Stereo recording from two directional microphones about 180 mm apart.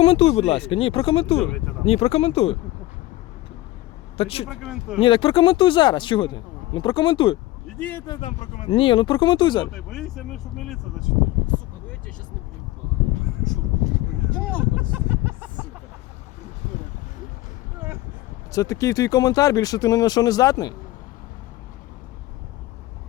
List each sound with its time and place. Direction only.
0.0 s speech: 35° left (ahead or behind)
4.2 s speech: 30° left (ahead or behind)
4.4 s speech: centre (ahead or behind)
4.9 s speech: 30° left (ahead or behind)
7.8 s speech: 10° left (ahead or behind)
8.0 s speech: 25° left (ahead or behind)
8.3 s speech: 40° left (ahead or behind)
9.7 s speech: centre (ahead or behind)
14.3 s speech: 5° left (ahead or behind)
14.8 s chicken: 10° right (ahead or behind)
17.7 s vehicle: 10° right (ahead or behind)
18.5 s speech: 15° left (ahead or behind)